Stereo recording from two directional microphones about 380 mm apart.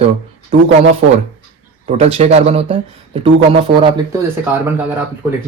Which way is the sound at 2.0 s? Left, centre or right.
Centre.